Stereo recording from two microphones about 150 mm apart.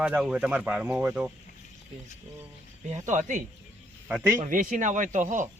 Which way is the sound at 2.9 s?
55° right (ahead or behind).